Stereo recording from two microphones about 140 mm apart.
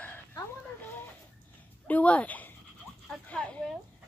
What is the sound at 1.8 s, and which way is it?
Speech, 10° left (ahead or behind).